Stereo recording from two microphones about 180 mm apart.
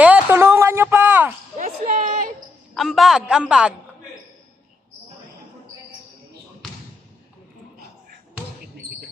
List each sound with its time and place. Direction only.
0.0 s a sound: 10° right (ahead or behind)
1.5 s basketball bounce: 45° right (ahead or behind)
2.7 s a woman's voice: centre (ahead or behind)